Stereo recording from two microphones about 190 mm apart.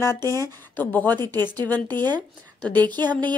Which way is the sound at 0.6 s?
10° left (ahead or behind).